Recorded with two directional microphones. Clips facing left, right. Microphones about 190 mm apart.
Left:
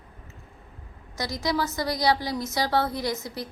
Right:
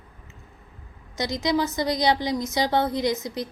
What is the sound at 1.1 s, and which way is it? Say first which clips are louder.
A woman's voice: right 4 dB; 20° right (ahead or behind).